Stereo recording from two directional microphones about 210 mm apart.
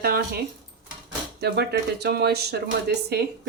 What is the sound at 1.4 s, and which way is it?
Speech, 50° right (ahead or behind).